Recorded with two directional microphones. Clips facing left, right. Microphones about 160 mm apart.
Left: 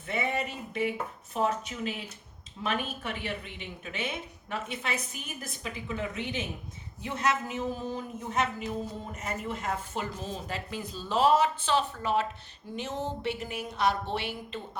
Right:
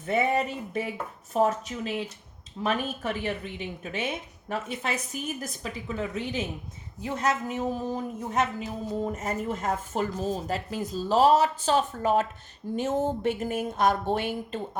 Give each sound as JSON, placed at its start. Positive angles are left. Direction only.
{"t": 0.0, "sound": "speech", "side_deg": -45}